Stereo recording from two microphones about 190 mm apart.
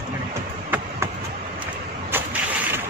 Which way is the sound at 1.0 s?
15° right (ahead or behind).